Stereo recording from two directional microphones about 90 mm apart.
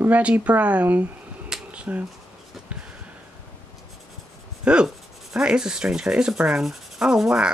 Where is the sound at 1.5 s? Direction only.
5° right (ahead or behind).